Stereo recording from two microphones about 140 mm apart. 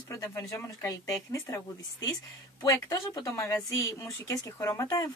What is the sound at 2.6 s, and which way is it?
Speech, 30° left (ahead or behind).